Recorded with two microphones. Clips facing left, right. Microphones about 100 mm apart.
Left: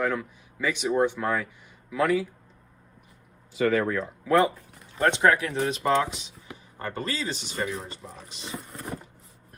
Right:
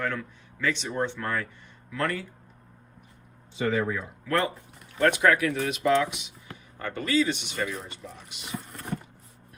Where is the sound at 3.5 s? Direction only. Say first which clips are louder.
Left 3 dB; 25° right (ahead or behind).